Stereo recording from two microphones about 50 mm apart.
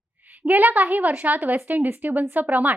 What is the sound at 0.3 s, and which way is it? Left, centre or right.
A woman's voice, right.